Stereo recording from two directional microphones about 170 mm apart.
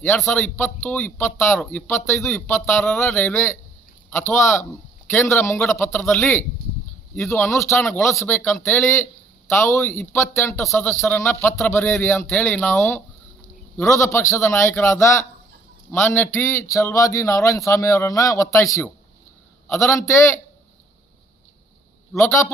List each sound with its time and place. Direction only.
0.0 s a man's voice: 10° left (ahead or behind)
22.2 s speech: 15° left (ahead or behind)